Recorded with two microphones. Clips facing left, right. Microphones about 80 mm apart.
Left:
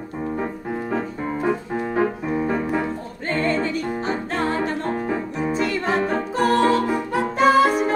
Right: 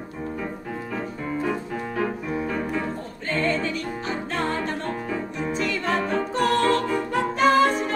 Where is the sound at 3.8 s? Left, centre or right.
Left.